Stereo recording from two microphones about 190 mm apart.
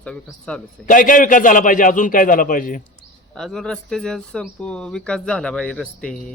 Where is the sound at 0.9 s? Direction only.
45° left (ahead or behind).